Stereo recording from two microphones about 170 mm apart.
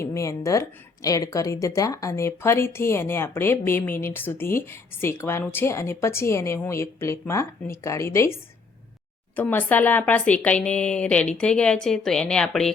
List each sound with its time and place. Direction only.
0.0 s speech: 15° left (ahead or behind)